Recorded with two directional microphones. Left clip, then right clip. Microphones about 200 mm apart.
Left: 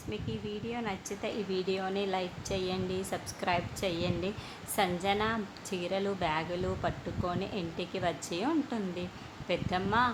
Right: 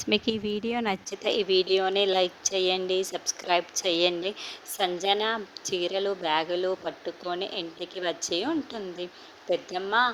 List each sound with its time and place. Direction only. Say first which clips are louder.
0.1 s speech: right 12 dB; 50° right (ahead or behind); by 10.1 s 25° right (ahead or behind)